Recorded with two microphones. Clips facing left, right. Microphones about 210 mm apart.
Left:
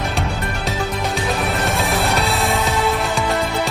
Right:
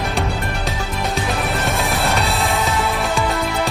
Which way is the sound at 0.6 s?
Centre (ahead or behind).